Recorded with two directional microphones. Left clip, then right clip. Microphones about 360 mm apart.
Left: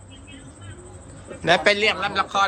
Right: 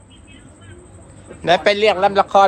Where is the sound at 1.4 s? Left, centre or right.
Centre.